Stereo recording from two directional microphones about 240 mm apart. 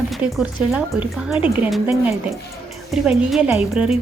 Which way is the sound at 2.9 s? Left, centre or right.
Centre.